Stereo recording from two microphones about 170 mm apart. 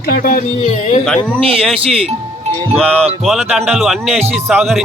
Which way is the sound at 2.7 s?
5° left (ahead or behind).